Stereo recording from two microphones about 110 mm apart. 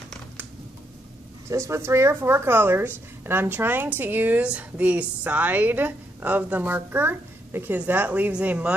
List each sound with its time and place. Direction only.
1.5 s a woman's voice: 25° right (ahead or behind); by 8.7 s 10° right (ahead or behind)